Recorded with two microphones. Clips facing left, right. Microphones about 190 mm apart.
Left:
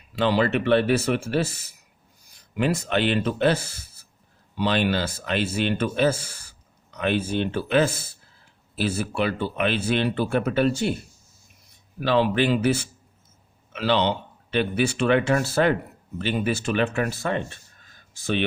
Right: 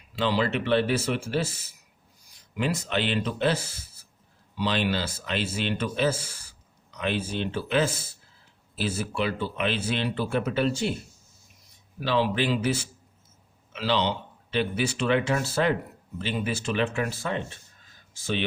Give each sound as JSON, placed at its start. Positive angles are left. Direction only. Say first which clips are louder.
{"t": 0.2, "sound": "speech", "louder": "left 4 dB", "side_deg": 55}
{"t": 11.9, "sound": "speech", "louder": "left 4 dB", "side_deg": 55}